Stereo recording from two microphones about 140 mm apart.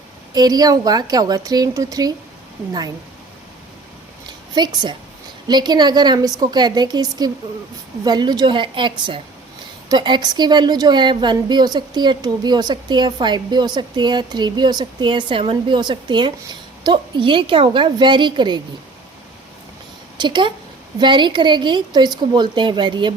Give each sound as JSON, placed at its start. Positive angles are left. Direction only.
{"t": 0.3, "sound": "a woman's voice", "side_deg": -30}
{"t": 4.3, "sound": "a sound", "side_deg": -30}
{"t": 5.5, "sound": "a woman's voice", "side_deg": -30}
{"t": 20.1, "sound": "a woman's voice", "side_deg": -35}